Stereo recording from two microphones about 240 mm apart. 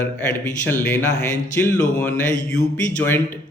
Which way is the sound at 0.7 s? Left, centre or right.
Centre.